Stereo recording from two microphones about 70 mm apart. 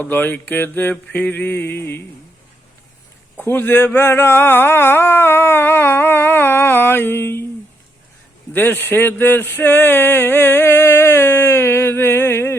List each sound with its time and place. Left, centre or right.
0.0 s mantra: left
3.3 s speech: left
8.5 s speech: left